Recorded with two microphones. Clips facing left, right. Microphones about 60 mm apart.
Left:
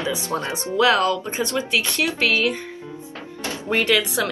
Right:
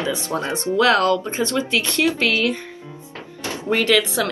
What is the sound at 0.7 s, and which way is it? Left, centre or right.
Speech, centre.